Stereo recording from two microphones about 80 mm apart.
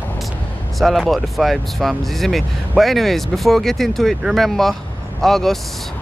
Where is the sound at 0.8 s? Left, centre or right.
Centre.